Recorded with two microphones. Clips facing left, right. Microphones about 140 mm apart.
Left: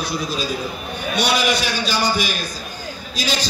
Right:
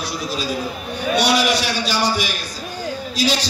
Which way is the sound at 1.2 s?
80° right.